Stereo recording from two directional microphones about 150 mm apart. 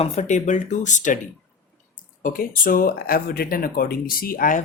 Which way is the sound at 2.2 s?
70° left (ahead or behind).